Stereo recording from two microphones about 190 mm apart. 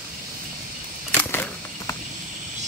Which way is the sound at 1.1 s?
10° left (ahead or behind).